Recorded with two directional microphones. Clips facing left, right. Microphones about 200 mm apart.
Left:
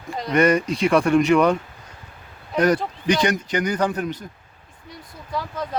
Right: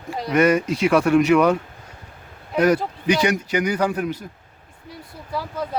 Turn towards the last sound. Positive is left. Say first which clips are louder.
# right 1 dB
turn(degrees=-5)  # may be behind; listen again after turning